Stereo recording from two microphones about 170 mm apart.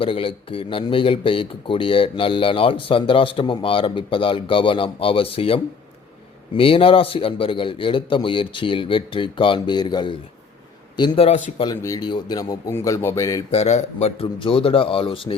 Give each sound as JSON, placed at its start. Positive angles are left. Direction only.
{"t": 0.0, "sound": "a man's voice", "side_deg": 30}
{"t": 11.6, "sound": "a man's voice", "side_deg": 20}
{"t": 13.5, "sound": "speech", "side_deg": 40}